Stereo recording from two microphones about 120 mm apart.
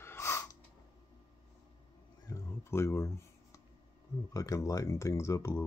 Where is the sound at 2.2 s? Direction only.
25° left (ahead or behind).